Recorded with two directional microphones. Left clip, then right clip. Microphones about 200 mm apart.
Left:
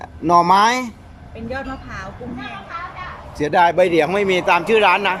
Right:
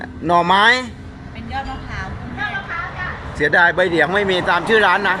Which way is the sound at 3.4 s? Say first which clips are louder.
Even; 10° left (ahead or behind).